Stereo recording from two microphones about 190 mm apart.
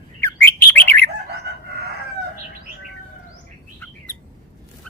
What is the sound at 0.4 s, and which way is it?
Bird, 10° left (ahead or behind).